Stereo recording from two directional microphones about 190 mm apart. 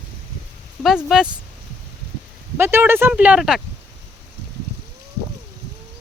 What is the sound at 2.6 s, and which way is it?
Speech, 10° right (ahead or behind).